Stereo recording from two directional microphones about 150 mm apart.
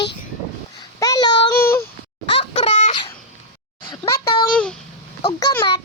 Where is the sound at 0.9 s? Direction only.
25° left (ahead or behind).